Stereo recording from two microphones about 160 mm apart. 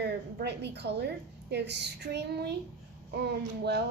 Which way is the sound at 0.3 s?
90° right.